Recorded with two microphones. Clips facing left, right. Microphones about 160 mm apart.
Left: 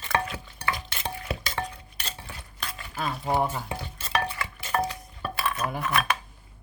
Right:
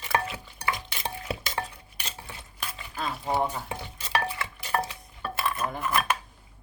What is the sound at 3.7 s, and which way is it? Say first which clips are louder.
Stir: left 1 dB; 15° right (ahead or behind).